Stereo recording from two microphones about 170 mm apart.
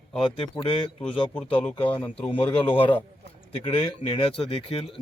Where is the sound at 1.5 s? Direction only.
30° left (ahead or behind).